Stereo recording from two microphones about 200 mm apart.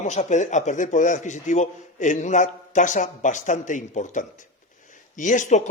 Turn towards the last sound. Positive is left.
turn(degrees=35)  # may be behind; listen again after turning